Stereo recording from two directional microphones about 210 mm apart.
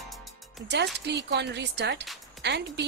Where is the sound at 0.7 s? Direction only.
55° right (ahead or behind).